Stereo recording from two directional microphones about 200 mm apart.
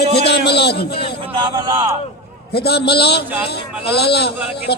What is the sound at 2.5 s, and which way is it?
A man's voice, 55° left (ahead or behind).